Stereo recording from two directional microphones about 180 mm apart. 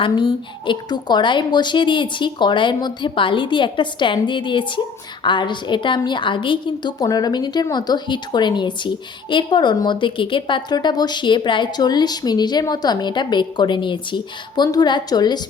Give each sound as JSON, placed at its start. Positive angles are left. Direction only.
{"t": 0.0, "sound": "a woman's voice", "side_deg": 25}